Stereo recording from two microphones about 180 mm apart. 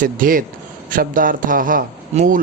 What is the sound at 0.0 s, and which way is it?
Speech, 50° right (ahead or behind).